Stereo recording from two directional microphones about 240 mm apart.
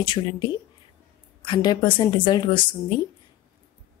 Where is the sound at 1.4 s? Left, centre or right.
Centre.